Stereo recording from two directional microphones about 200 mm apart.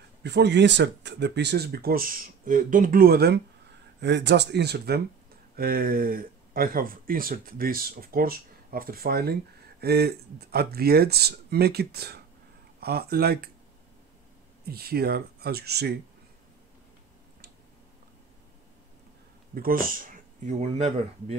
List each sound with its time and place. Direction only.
0.2 s speech: 60° right (ahead or behind)
14.7 s speech: 50° right (ahead or behind)
19.5 s speech: 45° right (ahead or behind)